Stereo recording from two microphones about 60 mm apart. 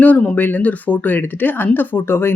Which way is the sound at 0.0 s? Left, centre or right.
Left.